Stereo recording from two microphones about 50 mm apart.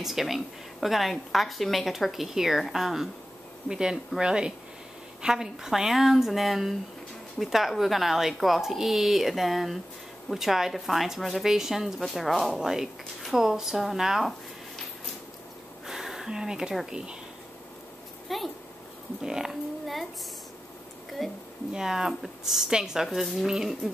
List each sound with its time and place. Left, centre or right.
0.0 s a woman's voice: centre
12.0 s a woman's voice: centre
12.5 s speech: centre
15.9 s a sound: centre
16.9 s speech: centre
18.3 s a woman's voice: centre
19.2 s speech: centre
21.2 s a woman's voice: centre
21.7 s speech: centre
23.0 s a woman's voice: centre